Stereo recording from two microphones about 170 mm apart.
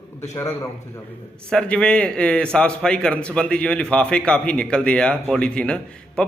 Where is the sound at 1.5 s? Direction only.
5° left (ahead or behind).